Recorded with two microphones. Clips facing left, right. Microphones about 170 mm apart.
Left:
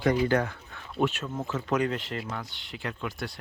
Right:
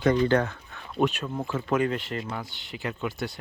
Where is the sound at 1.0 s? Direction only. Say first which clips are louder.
Right 2 dB; 15° right (ahead or behind).